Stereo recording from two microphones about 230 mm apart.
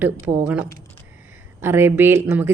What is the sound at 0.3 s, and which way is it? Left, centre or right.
A woman's voice, centre.